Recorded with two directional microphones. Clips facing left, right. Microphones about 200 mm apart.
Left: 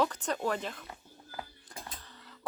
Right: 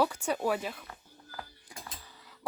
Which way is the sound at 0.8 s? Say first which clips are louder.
Left 1 dB; 20° left (ahead or behind).